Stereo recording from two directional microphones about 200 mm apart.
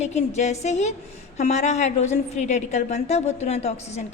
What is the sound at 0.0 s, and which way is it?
A woman's voice, 35° left (ahead or behind).